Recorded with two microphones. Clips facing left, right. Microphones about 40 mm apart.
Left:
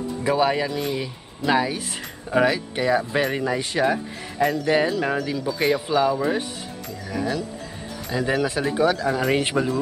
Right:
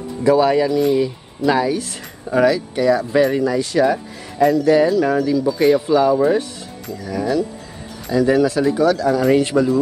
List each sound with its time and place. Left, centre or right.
0.2 s speech: centre